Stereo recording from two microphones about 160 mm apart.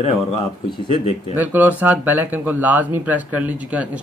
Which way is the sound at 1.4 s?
10° right (ahead or behind).